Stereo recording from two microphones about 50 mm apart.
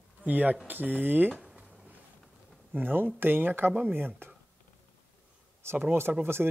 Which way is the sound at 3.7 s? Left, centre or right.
Right.